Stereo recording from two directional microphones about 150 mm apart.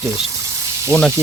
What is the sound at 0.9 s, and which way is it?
Speech, 10° left (ahead or behind).